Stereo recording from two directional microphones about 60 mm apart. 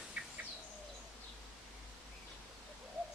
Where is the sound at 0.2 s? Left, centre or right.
Centre.